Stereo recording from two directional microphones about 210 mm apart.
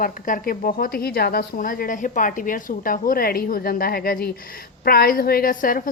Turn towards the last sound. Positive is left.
turn(degrees=40)  # may be behind; listen again after turning